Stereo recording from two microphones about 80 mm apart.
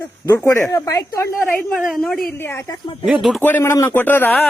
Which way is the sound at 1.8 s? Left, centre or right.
Centre.